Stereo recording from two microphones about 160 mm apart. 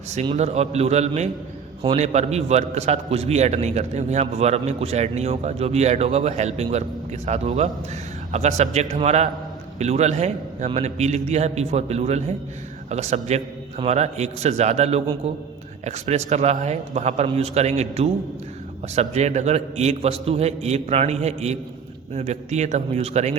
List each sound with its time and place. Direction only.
0.3 s a man's voice: 45° right (ahead or behind)